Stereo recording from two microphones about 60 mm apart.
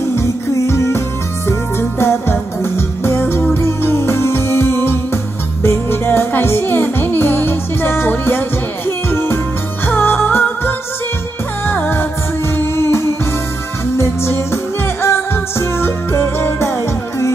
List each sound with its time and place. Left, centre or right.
0.1 s music: left